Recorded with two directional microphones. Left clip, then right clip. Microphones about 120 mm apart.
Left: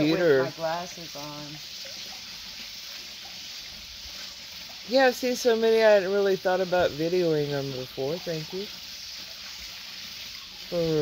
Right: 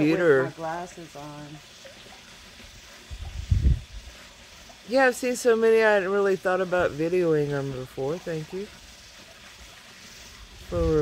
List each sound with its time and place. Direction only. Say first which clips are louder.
0.0 s speech: right 1 dB; centre (ahead or behind)
0.7 s speech: left 2 dB; 10° right (ahead or behind)
4.9 s speech: even; centre (ahead or behind)
10.7 s speech: right 1 dB; centre (ahead or behind)